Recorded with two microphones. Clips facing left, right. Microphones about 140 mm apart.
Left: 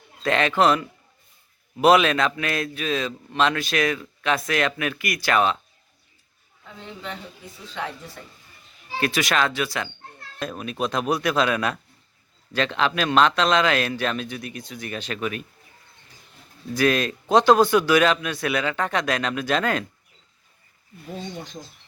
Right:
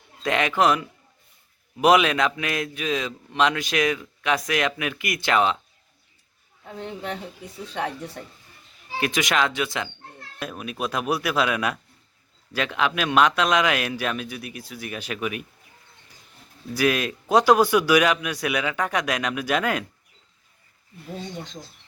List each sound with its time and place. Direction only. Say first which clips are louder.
0.2 s a man's voice: left 1 dB; 15° right (ahead or behind)
6.7 s a woman's voice: right 4 dB; 50° right (ahead or behind)
9.0 s a man's voice: even; 15° right (ahead or behind)
10.3 s a man's voice: left 2 dB; 10° right (ahead or behind)
16.7 s a man's voice: left 1 dB; 10° right (ahead or behind)